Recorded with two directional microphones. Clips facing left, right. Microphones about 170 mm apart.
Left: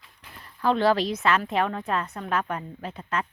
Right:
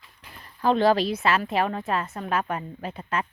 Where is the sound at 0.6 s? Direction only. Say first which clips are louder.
Right 2 dB; 15° right (ahead or behind).